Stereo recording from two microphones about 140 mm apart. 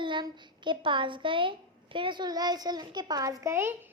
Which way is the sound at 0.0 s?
35° right (ahead or behind).